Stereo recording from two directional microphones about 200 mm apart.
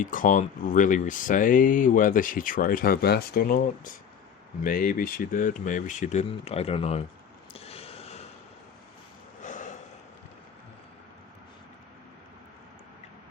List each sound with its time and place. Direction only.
0.0 s speech: 40° left (ahead or behind)
4.6 s speech: 45° left (ahead or behind)
7.5 s a sound: 30° left (ahead or behind)
9.4 s snort: 40° left (ahead or behind)